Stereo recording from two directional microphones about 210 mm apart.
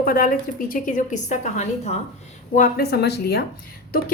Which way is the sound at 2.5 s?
45° left (ahead or behind).